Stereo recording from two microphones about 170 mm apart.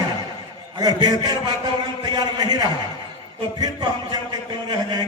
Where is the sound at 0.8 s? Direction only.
25° right (ahead or behind).